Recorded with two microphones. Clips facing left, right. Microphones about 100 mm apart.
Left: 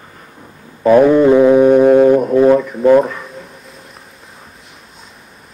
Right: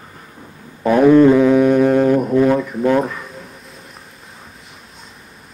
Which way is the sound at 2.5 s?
Centre (ahead or behind).